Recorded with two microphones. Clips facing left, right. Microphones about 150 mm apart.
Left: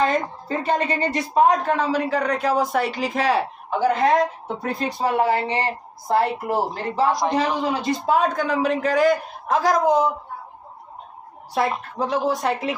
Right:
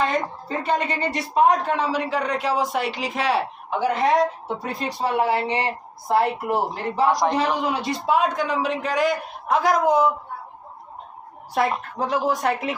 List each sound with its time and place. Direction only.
0.0 s a woman's voice: 40° left (ahead or behind)
7.1 s a man's voice: centre (ahead or behind)
7.3 s a man's voice: 35° left (ahead or behind)
11.9 s a man's voice: 30° left (ahead or behind)